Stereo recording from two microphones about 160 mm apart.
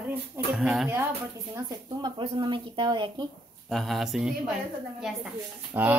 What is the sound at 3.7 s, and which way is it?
Speech, centre (ahead or behind).